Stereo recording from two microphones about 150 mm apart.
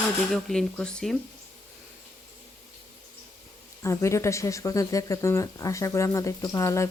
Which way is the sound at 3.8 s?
20° left (ahead or behind).